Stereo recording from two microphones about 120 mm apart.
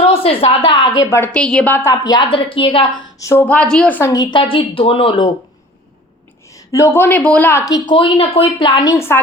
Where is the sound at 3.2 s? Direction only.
20° left (ahead or behind).